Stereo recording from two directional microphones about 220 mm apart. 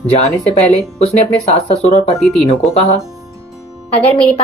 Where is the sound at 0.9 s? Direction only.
30° left (ahead or behind).